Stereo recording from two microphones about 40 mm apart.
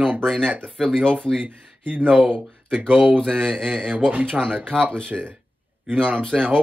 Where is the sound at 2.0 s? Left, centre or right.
Right.